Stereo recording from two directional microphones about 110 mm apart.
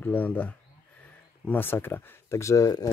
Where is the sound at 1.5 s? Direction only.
20° left (ahead or behind).